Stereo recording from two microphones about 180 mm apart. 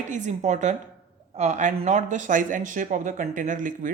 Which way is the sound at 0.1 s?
40° right (ahead or behind).